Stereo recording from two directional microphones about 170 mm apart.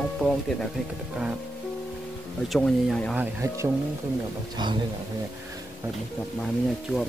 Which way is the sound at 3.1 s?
15° right (ahead or behind).